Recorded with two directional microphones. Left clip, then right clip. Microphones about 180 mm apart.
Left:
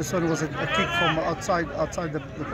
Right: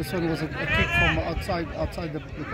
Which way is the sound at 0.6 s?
70° left (ahead or behind).